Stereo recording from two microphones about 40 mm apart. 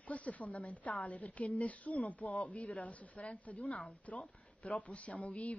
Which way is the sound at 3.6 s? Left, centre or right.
Centre.